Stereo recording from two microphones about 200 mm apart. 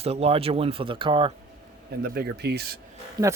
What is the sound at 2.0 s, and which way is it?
Speech, 50° right (ahead or behind).